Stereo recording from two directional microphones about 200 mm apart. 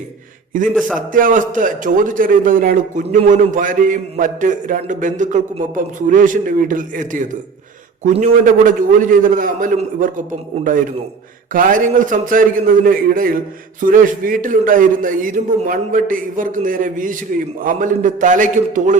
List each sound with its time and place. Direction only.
0.7 s a man's voice: 5° left (ahead or behind)
1.1 s a man's voice: 40° right (ahead or behind)